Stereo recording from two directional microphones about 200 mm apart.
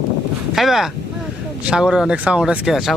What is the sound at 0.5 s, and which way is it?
Speech, centre (ahead or behind).